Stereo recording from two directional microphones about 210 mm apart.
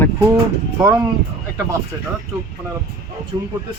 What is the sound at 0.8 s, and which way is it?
Speech, 10° right (ahead or behind).